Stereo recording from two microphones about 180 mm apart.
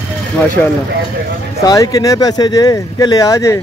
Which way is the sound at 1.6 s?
20° left (ahead or behind).